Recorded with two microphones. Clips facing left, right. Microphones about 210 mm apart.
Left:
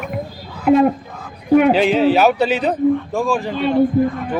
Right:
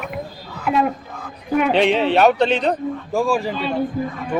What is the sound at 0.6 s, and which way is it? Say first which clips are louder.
Speech: left 7 dB; 45° left (ahead or behind).